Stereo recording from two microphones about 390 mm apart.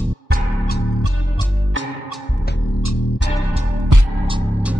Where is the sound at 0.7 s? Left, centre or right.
Left.